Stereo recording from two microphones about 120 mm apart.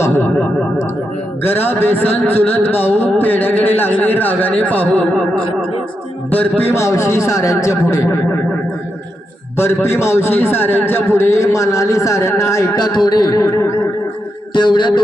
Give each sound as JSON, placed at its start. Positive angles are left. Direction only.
{"t": 0.0, "sound": "a sound", "side_deg": 25}
{"t": 1.4, "sound": "a man's voice", "side_deg": 15}
{"t": 6.3, "sound": "a man's voice", "side_deg": 15}
{"t": 9.6, "sound": "a man's voice", "side_deg": 20}